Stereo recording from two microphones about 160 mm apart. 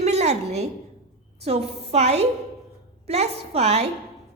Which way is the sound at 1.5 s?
40° right (ahead or behind).